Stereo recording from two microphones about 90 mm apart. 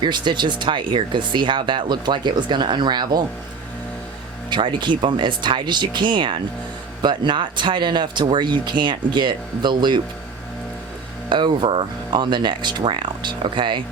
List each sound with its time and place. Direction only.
0.0 s speech: 55° right (ahead or behind)
4.4 s speech: 60° right (ahead or behind)
11.3 s speech: 60° right (ahead or behind)